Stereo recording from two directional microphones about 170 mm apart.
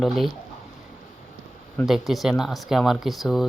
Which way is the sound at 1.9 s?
Centre (ahead or behind).